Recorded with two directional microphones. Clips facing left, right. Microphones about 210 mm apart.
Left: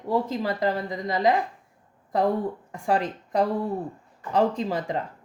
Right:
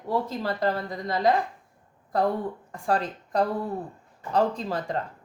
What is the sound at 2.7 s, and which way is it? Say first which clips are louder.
A woman's voice: left 1 dB; 20° left (ahead or behind).